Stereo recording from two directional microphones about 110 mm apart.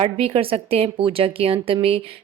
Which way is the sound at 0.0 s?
65° right (ahead or behind).